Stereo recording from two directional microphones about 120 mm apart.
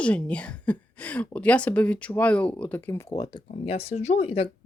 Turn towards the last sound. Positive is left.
turn(degrees=55)  # may be behind; listen again after turning